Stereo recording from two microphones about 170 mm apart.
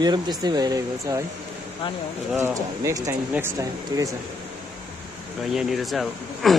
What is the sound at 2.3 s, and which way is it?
Speech, 15° right (ahead or behind).